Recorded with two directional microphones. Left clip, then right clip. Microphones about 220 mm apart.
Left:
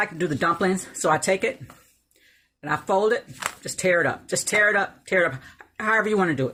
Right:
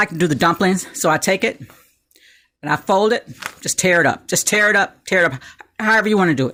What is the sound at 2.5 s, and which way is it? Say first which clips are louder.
Speech: right 6 dB; 45° right (ahead or behind).